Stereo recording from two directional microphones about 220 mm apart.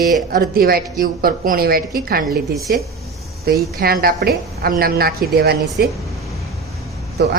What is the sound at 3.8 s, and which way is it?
A woman's voice, 45° right (ahead or behind).